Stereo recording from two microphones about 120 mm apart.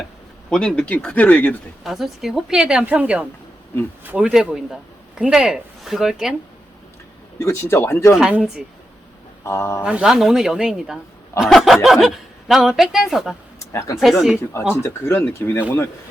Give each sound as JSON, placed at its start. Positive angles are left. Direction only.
{"t": 0.5, "sound": "speech", "side_deg": 5}
{"t": 1.8, "sound": "a woman's voice", "side_deg": 0}
{"t": 7.3, "sound": "speech", "side_deg": 25}
{"t": 8.1, "sound": "a woman's voice", "side_deg": -5}
{"t": 9.4, "sound": "speech", "side_deg": 25}
{"t": 9.8, "sound": "a woman's voice", "side_deg": -5}
{"t": 13.7, "sound": "speech", "side_deg": 25}
{"t": 14.0, "sound": "a woman's voice", "side_deg": 0}
{"t": 14.8, "sound": "speech", "side_deg": 20}